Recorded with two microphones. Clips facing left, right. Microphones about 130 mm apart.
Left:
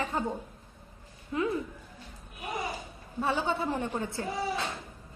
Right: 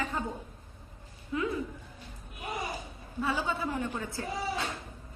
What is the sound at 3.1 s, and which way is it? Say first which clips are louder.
A woman's voice: left 2 dB; 30° left (ahead or behind).